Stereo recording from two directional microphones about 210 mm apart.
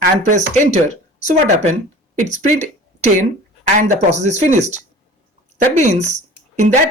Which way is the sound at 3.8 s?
35° right (ahead or behind).